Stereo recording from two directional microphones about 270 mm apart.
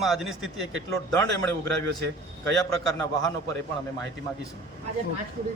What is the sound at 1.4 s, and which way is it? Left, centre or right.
Speech, centre.